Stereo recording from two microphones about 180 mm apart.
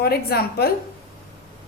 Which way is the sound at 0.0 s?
60° left (ahead or behind).